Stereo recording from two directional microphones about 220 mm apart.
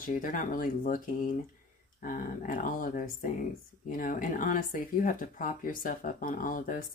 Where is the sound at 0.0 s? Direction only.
35° left (ahead or behind).